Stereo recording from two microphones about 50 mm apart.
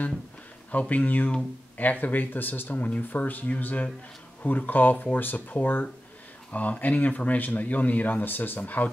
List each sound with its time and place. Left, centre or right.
0.7 s speech: left